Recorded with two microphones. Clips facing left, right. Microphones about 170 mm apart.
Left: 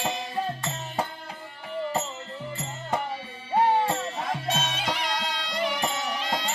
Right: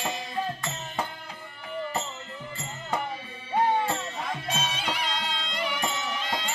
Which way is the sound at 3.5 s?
35° left (ahead or behind).